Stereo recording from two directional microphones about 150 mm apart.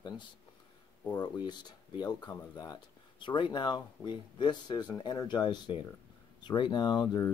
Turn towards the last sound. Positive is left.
turn(degrees=25)  # may be behind; listen again after turning